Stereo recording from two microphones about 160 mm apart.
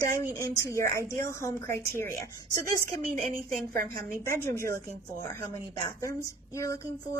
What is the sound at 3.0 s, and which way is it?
Speech, 50° right (ahead or behind).